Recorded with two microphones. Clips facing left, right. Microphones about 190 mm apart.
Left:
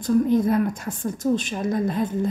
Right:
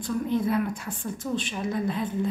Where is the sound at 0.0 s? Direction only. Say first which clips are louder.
Left 7 dB; 45° left (ahead or behind).